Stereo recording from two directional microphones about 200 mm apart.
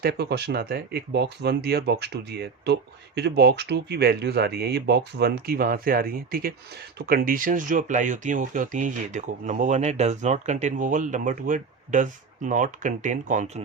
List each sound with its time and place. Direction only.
0.0 s speech: 55° right (ahead or behind)